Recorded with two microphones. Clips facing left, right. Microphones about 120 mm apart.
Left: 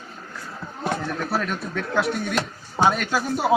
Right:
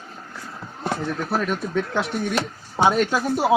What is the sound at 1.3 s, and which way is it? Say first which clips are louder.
Speech: right 2 dB; 20° right (ahead or behind).